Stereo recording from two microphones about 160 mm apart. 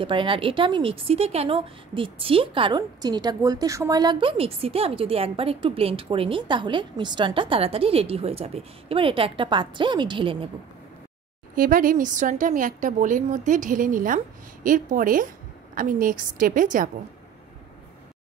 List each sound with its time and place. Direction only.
0.0 s speech: 30° right (ahead or behind)
11.5 s a woman's voice: 60° right (ahead or behind)